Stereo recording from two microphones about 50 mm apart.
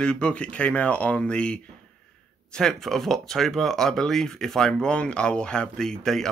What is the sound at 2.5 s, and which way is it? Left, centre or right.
Speech, centre.